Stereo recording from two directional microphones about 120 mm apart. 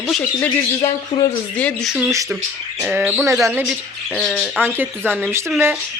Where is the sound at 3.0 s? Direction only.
10° right (ahead or behind).